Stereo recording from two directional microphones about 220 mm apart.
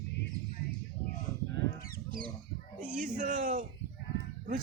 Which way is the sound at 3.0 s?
35° right (ahead or behind).